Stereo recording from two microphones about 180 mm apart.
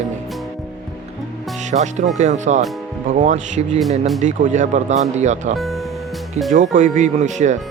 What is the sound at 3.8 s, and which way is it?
Speech, centre (ahead or behind).